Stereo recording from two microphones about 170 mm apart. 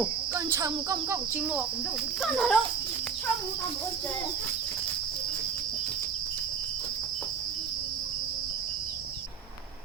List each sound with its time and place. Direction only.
0.3 s speech: 20° right (ahead or behind)
2.2 s speech: centre (ahead or behind)